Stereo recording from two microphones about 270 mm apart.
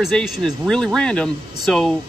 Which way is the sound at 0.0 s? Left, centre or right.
Centre.